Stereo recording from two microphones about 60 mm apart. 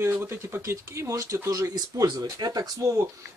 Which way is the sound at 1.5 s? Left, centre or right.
Right.